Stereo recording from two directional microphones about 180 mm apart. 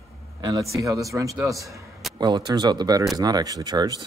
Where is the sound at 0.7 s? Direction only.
20° right (ahead or behind).